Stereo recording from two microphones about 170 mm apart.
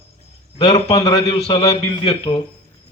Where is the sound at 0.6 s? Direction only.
35° left (ahead or behind).